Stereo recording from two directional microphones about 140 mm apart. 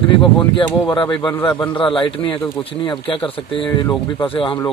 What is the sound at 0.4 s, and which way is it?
Speech, 35° left (ahead or behind).